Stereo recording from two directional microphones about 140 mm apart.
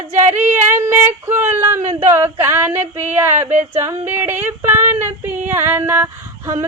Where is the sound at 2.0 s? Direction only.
15° right (ahead or behind).